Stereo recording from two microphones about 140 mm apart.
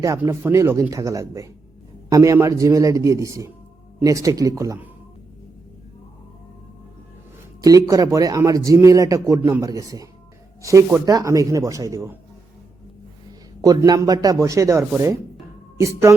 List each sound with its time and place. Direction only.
0.0 s speech: 20° right (ahead or behind)
7.6 s speech: 25° right (ahead or behind)
13.6 s speech: 25° right (ahead or behind)